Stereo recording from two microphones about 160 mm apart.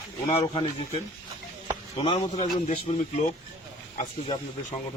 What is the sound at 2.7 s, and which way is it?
Speech, 50° left (ahead or behind).